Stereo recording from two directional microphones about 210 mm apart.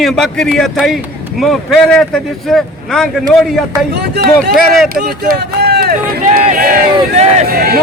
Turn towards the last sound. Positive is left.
turn(degrees=-40)  # may be behind; listen again after turning